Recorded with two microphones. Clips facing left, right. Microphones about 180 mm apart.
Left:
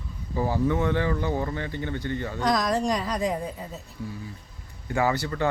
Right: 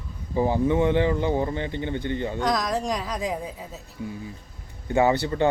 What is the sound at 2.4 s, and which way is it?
A woman's voice, centre (ahead or behind).